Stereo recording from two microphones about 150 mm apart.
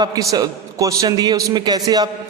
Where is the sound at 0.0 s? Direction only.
25° right (ahead or behind).